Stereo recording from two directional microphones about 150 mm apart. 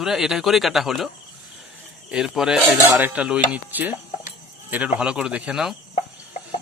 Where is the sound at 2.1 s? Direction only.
5° right (ahead or behind).